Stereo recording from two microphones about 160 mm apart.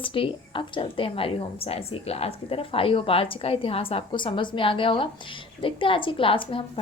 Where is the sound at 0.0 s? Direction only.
35° left (ahead or behind).